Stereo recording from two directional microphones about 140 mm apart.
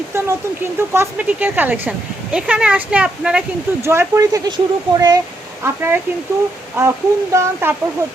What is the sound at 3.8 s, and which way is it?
Speech, 20° right (ahead or behind).